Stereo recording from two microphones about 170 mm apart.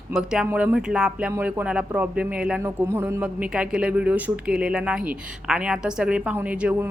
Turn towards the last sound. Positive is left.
turn(degrees=-10)  # may be behind; listen again after turning